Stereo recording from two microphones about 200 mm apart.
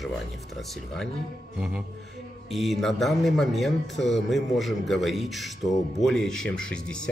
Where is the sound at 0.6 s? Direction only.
Centre (ahead or behind).